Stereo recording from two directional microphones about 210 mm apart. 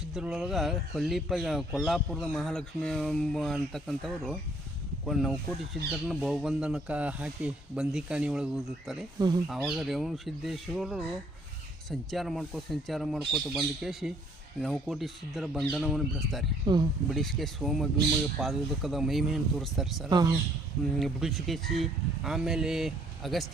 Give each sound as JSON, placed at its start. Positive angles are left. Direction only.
{"t": 0.1, "sound": "speech", "side_deg": 0}
{"t": 9.1, "sound": "speech", "side_deg": -20}
{"t": 9.5, "sound": "speech", "side_deg": 0}
{"t": 16.6, "sound": "speech", "side_deg": -20}
{"t": 17.1, "sound": "speech", "side_deg": 0}
{"t": 20.1, "sound": "speech", "side_deg": -20}
{"t": 21.0, "sound": "speech", "side_deg": 0}